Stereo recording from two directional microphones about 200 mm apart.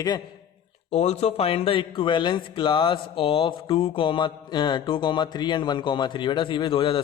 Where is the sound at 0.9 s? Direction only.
35° left (ahead or behind).